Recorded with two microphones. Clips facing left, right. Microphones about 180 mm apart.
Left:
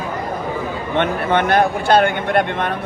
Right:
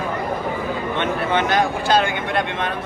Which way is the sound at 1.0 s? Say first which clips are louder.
Left 5 dB; 55° left (ahead or behind).